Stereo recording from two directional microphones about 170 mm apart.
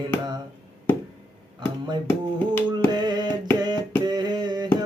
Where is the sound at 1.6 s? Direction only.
25° right (ahead or behind).